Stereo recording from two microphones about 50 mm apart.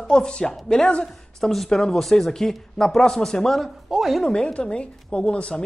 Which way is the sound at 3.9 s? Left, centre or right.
Centre.